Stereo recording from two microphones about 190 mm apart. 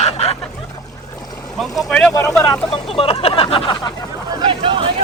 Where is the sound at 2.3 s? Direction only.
5° left (ahead or behind).